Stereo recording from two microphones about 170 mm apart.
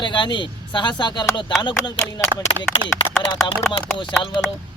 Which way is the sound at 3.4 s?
30° left (ahead or behind).